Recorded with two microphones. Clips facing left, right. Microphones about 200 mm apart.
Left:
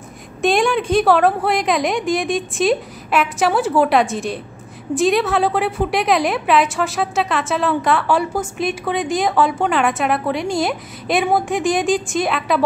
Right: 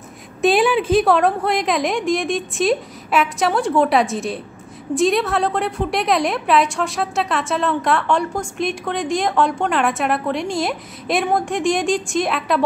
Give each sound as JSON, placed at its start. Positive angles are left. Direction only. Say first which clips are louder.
{"t": 0.4, "sound": "a woman's voice", "louder": "right 1 dB", "side_deg": -5}